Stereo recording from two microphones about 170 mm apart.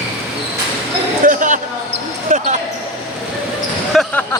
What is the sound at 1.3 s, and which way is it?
Speech, 50° right (ahead or behind).